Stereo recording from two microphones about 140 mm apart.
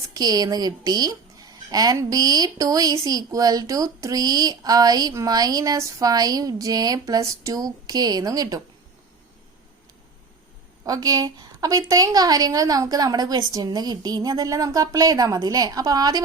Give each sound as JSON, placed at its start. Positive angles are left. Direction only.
{"t": 0.1, "sound": "speech", "side_deg": -30}
{"t": 10.8, "sound": "speech", "side_deg": -25}